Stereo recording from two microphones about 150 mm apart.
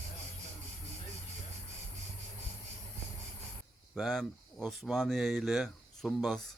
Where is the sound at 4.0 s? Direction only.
Centre (ahead or behind).